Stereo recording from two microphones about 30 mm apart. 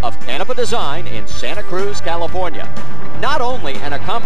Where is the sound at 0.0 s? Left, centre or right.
Left.